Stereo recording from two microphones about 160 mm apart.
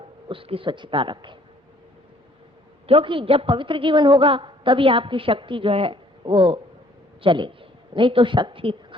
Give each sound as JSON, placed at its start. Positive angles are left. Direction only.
{"t": 0.3, "sound": "a woman's voice", "side_deg": -35}
{"t": 2.8, "sound": "a woman's voice", "side_deg": -35}